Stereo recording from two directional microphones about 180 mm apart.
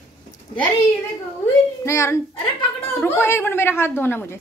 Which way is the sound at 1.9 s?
15° left (ahead or behind).